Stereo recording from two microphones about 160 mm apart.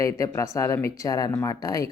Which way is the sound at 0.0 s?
20° left (ahead or behind).